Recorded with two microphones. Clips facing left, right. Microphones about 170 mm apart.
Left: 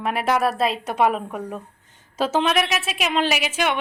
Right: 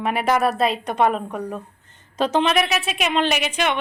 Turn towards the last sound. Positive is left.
turn(degrees=5)  # may be behind; listen again after turning